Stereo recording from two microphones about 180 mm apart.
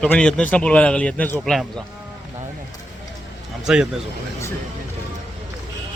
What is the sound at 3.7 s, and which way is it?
Speech, 5° right (ahead or behind).